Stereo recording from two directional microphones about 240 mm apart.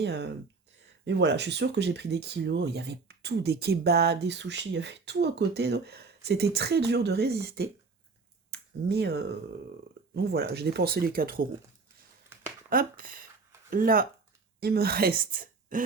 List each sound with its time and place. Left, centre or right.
0.0 s speech: right
8.4 s finger snapping: right
10.2 s speech: right
12.7 s a woman's voice: right